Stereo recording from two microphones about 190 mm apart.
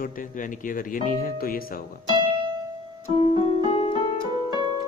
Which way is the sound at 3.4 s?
30° left (ahead or behind).